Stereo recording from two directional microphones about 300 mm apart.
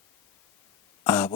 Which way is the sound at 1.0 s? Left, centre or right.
Centre.